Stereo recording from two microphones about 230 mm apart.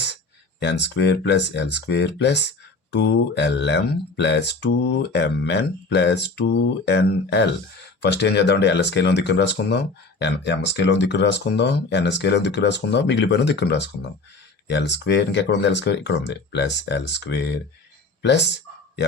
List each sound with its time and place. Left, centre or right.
0.6 s speech: left